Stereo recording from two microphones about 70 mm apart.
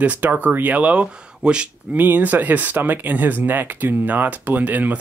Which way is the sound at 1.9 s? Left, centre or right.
Right.